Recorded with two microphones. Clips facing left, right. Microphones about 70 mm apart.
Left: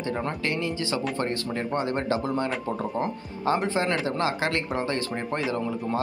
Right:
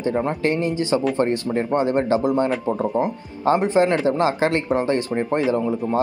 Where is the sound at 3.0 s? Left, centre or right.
Centre.